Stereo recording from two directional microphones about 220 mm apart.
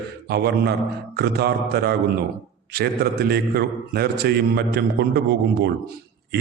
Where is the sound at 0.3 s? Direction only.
45° right (ahead or behind).